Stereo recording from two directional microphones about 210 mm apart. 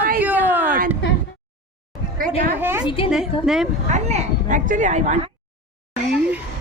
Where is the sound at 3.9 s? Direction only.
30° right (ahead or behind).